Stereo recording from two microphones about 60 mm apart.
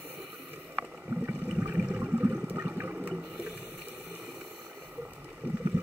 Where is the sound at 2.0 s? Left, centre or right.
Right.